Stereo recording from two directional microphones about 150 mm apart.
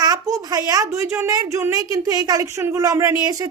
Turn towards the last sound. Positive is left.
turn(degrees=-20)  # may be behind; listen again after turning